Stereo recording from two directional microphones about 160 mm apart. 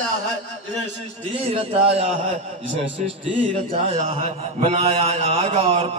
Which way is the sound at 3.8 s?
35° right (ahead or behind).